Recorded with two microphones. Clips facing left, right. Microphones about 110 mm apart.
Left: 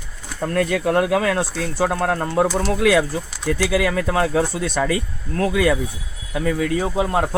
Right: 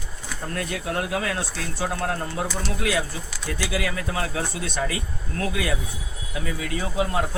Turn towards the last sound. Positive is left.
turn(degrees=35)  # may be behind; listen again after turning